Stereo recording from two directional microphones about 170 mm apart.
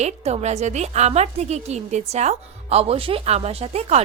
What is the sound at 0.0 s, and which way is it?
A woman's voice, 40° right (ahead or behind).